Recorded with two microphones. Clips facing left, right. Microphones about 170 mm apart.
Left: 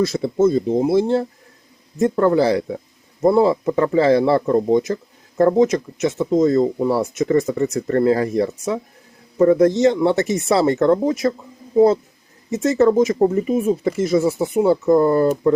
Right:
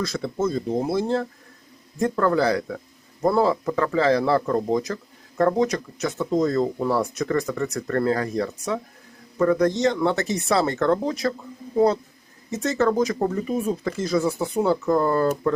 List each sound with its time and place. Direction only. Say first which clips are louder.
0.0 s speech: left 8 dB; 25° left (ahead or behind)
12.6 s speech: left 6 dB; 25° left (ahead or behind)